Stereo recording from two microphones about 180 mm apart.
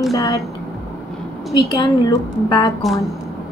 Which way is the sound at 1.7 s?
25° left (ahead or behind).